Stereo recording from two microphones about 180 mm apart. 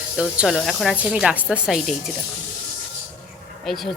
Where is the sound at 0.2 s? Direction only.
Centre (ahead or behind).